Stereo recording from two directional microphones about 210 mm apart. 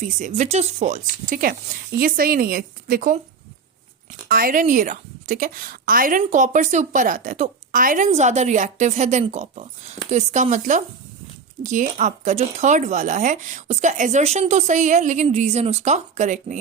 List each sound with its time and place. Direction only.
0.0 s a woman's voice: 35° right (ahead or behind)
4.3 s a woman's voice: 45° right (ahead or behind)